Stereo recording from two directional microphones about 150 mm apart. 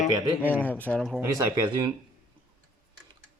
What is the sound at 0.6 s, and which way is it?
Speech, 10° left (ahead or behind).